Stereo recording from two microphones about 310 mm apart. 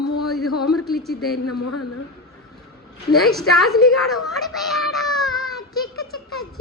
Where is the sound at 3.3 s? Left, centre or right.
Centre.